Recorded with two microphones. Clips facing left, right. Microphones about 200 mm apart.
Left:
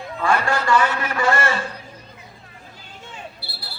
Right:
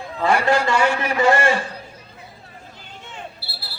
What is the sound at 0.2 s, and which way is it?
A man's voice, 20° right (ahead or behind).